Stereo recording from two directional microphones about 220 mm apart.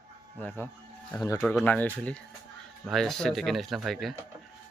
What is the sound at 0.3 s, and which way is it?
Speech, 5° left (ahead or behind).